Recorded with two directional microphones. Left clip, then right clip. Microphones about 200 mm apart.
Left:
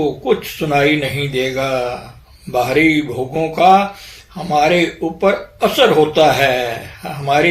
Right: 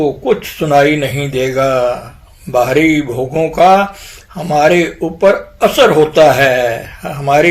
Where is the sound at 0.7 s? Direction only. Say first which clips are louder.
Right 4 dB; 35° right (ahead or behind).